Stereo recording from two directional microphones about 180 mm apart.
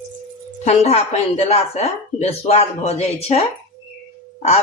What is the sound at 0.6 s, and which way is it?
Speech, 35° left (ahead or behind).